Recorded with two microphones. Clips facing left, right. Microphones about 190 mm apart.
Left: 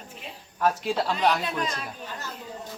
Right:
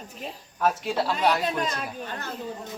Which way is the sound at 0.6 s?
5° right (ahead or behind).